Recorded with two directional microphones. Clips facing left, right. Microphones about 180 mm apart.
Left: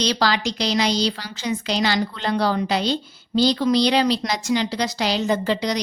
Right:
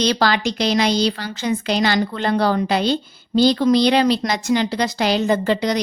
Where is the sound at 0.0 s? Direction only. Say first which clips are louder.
Right 3 dB; 55° right (ahead or behind).